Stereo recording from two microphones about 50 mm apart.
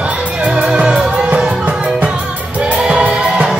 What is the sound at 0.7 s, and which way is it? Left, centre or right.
Music, centre.